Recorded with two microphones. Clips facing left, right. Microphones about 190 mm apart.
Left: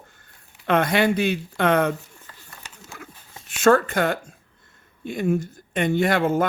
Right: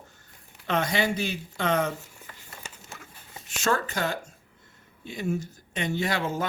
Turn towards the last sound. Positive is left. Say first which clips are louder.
# left 8 dB
turn(degrees=55)  # may be behind; listen again after turning